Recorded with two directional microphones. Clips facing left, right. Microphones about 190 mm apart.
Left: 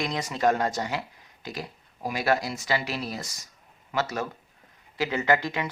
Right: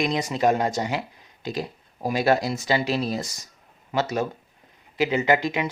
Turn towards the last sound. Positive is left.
turn(degrees=-15)  # may be behind; listen again after turning